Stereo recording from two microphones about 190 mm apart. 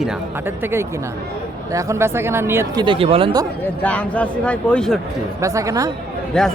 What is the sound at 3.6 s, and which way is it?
A man's voice, 10° left (ahead or behind).